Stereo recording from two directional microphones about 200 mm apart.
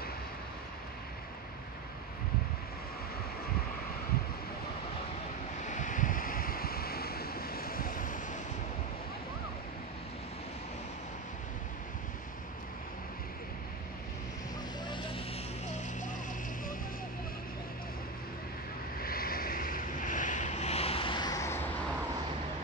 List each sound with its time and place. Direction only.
5.6 s waves: 40° left (ahead or behind)
14.9 s vehicle: 25° left (ahead or behind)
18.9 s vehicle: 45° left (ahead or behind); by 21.6 s 15° left (ahead or behind)